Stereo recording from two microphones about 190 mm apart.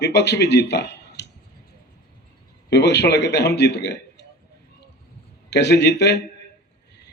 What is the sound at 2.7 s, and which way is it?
A man's voice, 65° left (ahead or behind).